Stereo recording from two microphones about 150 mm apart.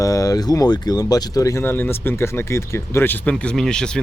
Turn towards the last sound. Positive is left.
turn(degrees=5)  # may be behind; listen again after turning